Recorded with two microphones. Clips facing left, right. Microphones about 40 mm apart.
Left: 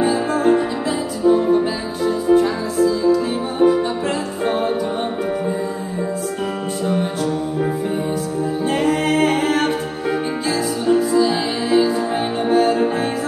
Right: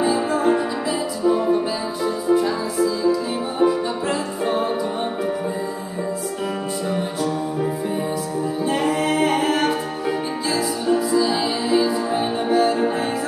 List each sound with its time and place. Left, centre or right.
0.0 s music: left
1.2 s music: left
2.0 s music: left
3.6 s music: centre
4.1 s music: left
8.8 s a capella: left
10.5 s music: left
11.1 s music: left
12.2 s music: left